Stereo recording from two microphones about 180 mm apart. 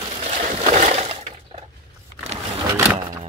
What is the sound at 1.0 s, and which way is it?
Breaking, 35° right (ahead or behind).